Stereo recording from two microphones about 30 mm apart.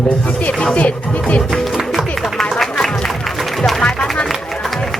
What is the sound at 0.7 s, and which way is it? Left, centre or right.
Speech, left.